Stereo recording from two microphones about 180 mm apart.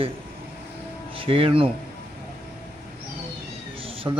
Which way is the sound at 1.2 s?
30° right (ahead or behind).